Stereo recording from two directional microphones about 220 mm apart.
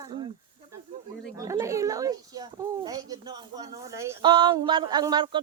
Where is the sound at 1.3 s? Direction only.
15° right (ahead or behind).